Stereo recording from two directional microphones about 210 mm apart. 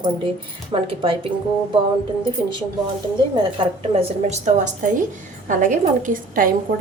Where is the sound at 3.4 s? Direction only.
25° right (ahead or behind).